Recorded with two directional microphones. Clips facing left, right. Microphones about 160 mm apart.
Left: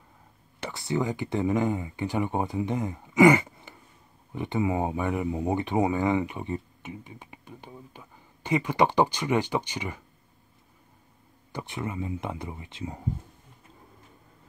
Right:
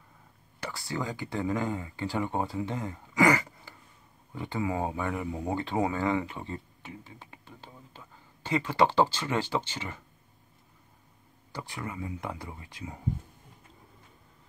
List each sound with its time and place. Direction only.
0.6 s speech: 20° left (ahead or behind)
11.5 s speech: 20° left (ahead or behind)